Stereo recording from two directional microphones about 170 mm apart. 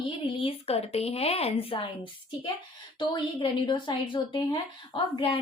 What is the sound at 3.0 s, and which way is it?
A woman's voice, 25° left (ahead or behind).